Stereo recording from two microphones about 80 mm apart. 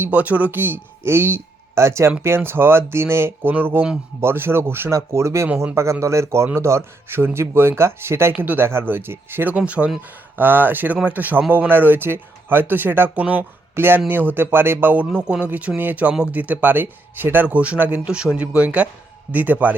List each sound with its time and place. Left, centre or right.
0.0 s a man's voice: centre